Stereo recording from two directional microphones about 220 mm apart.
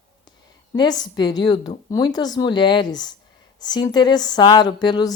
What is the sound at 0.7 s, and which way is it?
Speech, 20° left (ahead or behind).